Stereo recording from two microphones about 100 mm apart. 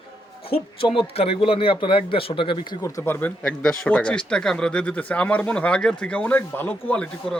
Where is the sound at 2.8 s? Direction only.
25° left (ahead or behind).